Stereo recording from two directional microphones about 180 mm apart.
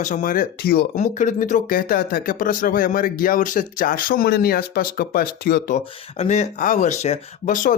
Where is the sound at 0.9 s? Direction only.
45° left (ahead or behind); by 5.7 s 60° left (ahead or behind).